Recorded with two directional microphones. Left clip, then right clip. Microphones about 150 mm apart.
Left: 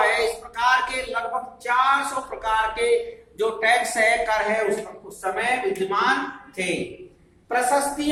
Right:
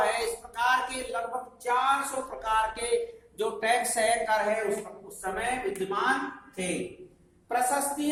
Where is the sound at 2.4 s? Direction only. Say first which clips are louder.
Left 5 dB; 55° right (ahead or behind).